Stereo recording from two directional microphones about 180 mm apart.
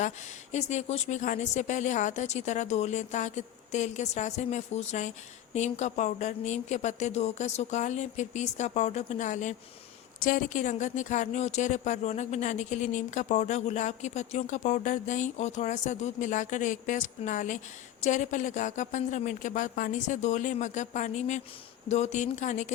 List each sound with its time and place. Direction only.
0.5 s speech: 40° left (ahead or behind)